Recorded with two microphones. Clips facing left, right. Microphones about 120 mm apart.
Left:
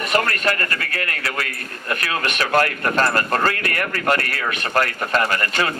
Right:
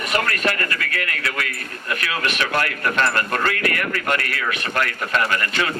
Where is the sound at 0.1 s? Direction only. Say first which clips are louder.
Left 1 dB; 40° left (ahead or behind).